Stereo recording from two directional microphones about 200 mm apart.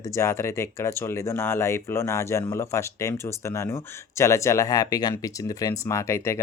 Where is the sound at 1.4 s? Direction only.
10° left (ahead or behind).